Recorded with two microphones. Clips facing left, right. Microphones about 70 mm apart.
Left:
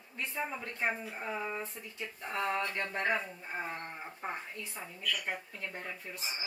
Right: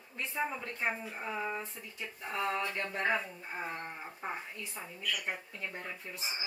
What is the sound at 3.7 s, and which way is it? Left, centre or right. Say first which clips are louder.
A woman's voice: even; centre.